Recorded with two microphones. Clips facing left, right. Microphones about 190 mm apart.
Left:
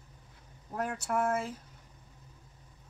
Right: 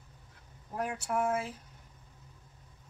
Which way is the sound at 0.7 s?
10° right (ahead or behind).